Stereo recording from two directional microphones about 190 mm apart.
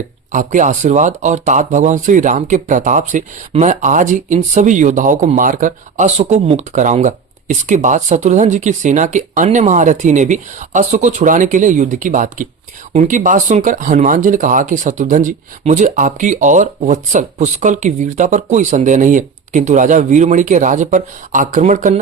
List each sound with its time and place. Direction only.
0.3 s speech: 40° right (ahead or behind)